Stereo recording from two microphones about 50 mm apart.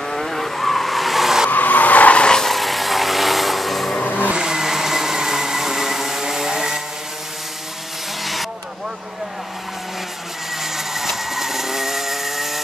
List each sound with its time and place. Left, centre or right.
0.1 s vehicle: centre
1.5 s vehicle: left
2.2 s vehicle: centre
2.5 s vehicle: centre
4.0 s vehicle: left
4.3 s blender: centre
8.2 s vehicle: centre
10.5 s chainsaw: centre